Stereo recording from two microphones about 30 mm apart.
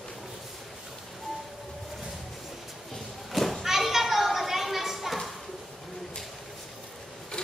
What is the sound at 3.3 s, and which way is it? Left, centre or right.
Children playing, centre.